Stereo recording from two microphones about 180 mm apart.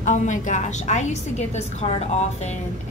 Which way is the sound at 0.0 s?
45° left (ahead or behind).